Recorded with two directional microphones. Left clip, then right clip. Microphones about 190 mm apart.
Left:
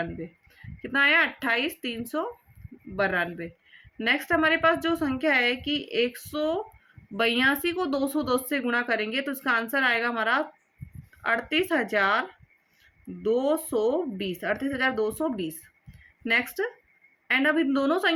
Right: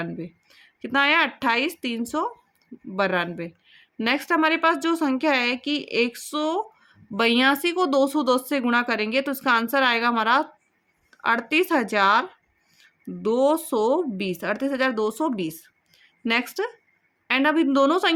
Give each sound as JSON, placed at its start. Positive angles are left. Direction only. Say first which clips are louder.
{"t": 0.8, "sound": "speech", "louder": "right 2 dB", "side_deg": -50}
{"t": 13.2, "sound": "speech", "louder": "right 4 dB", "side_deg": -55}